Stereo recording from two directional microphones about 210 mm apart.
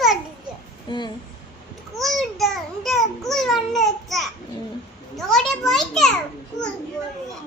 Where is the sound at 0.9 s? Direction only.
20° left (ahead or behind).